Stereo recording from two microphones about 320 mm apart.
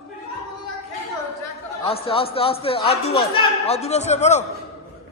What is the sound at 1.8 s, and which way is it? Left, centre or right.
A man's voice, centre.